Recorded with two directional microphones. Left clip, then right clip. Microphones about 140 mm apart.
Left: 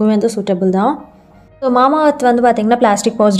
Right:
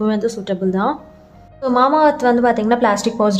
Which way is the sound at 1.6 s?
30° left (ahead or behind).